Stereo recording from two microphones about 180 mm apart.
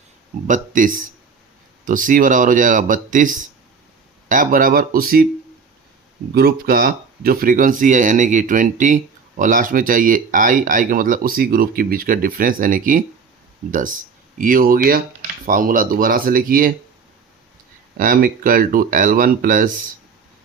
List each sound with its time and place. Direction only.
0.4 s speech: 45° right (ahead or behind)
6.3 s speech: 55° right (ahead or behind)
17.9 s speech: 50° right (ahead or behind)